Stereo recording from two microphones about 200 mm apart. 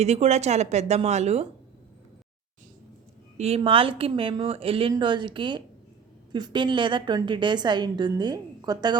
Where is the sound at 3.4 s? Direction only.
30° right (ahead or behind).